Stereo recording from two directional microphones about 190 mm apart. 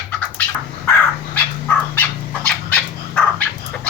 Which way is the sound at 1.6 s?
5° left (ahead or behind).